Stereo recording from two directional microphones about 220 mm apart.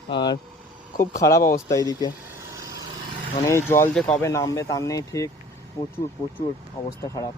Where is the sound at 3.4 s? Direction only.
10° left (ahead or behind).